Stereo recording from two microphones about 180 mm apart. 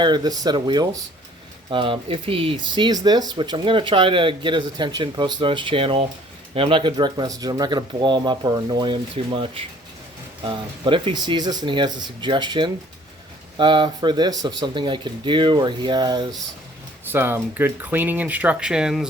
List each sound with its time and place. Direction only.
0.0 s speech: 25° right (ahead or behind)
17.1 s speech: 10° right (ahead or behind)